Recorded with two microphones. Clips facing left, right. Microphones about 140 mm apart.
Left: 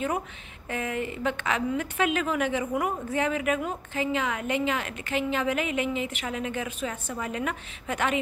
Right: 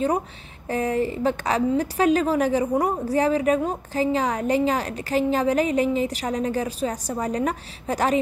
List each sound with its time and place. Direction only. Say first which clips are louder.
0.7 s a woman's voice: right 7 dB; 35° right (ahead or behind)